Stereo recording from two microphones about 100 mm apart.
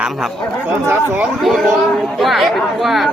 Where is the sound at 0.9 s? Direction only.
20° right (ahead or behind).